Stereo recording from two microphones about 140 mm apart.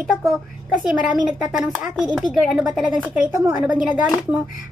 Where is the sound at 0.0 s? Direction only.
Centre (ahead or behind).